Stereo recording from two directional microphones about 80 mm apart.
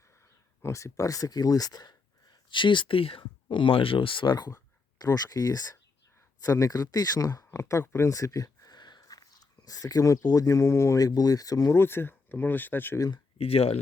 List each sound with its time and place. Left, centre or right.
0.6 s speech: left
4.9 s speech: left
11.0 s speech: left
11.7 s speech: left